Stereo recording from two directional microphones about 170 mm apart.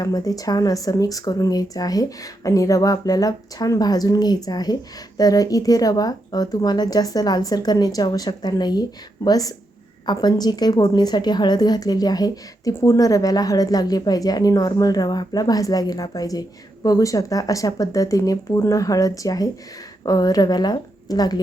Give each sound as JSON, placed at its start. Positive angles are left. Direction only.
{"t": 0.0, "sound": "a woman's voice", "side_deg": 20}